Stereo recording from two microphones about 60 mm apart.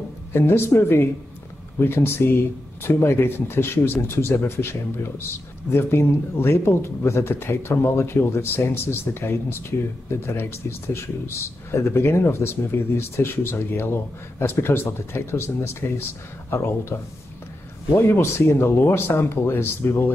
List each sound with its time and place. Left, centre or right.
0.3 s speech: left
17.9 s speech: left